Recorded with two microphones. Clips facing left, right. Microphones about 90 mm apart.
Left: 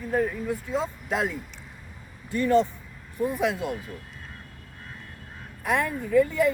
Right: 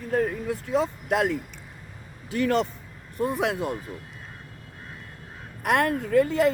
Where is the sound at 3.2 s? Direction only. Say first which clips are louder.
Even; 65° right (ahead or behind).